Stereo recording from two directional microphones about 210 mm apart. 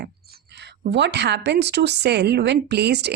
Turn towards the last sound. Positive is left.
turn(degrees=-50)  # may be behind; listen again after turning